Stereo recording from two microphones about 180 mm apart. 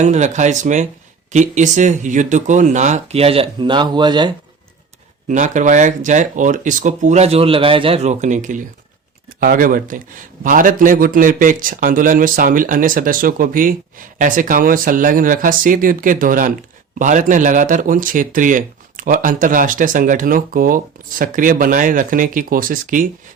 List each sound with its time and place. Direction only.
0.0 s speech: 40° right (ahead or behind); by 4.3 s 25° right (ahead or behind)
5.3 s speech: 45° right (ahead or behind)